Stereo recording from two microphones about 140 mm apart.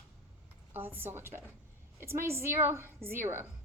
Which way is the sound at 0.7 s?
15° right (ahead or behind).